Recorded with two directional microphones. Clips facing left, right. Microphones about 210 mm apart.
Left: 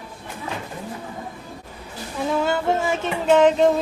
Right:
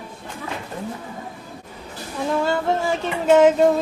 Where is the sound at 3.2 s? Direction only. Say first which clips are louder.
Right 2 dB; 10° right (ahead or behind).